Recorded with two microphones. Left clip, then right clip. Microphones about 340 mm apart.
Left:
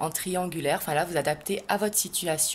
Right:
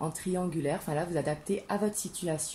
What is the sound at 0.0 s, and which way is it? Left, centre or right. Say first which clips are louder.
Speech: left 5 dB; left.